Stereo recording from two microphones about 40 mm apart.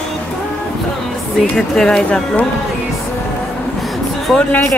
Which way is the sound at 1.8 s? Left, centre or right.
Left.